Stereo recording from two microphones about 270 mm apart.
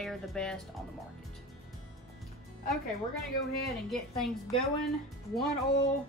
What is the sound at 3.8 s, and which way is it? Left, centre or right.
Speech, centre.